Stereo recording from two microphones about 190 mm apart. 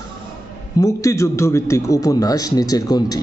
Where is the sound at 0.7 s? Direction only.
15° left (ahead or behind).